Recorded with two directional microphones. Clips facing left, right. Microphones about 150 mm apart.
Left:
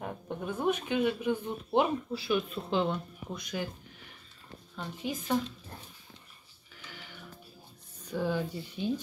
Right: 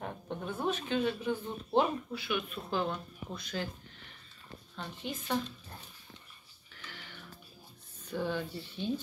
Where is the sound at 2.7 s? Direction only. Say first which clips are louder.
Left 3 dB; 20° left (ahead or behind).